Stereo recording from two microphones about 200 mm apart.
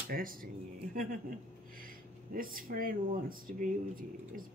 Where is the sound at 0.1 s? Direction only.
45° right (ahead or behind).